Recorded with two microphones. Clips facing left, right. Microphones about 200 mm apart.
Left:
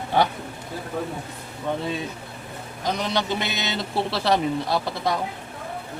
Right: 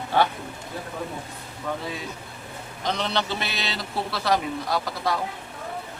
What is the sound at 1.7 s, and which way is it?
Speech, 25° left (ahead or behind).